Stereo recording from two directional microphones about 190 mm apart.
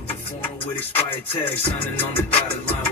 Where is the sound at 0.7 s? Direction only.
10° left (ahead or behind).